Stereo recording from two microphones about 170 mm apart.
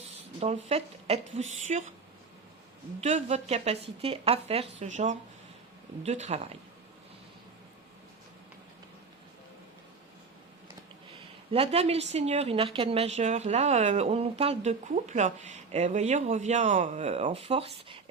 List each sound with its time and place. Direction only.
0.3 s speech: 40° right (ahead or behind)
3.0 s speech: 40° right (ahead or behind)
11.5 s speech: 35° right (ahead or behind)